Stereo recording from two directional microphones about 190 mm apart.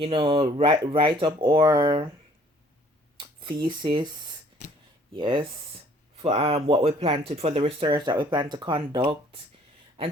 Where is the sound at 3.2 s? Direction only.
25° right (ahead or behind).